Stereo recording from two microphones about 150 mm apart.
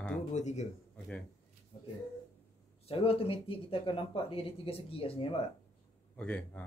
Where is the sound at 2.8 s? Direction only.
40° left (ahead or behind).